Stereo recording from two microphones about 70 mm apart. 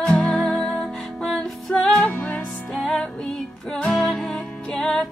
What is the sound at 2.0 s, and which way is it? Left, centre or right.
Music, centre.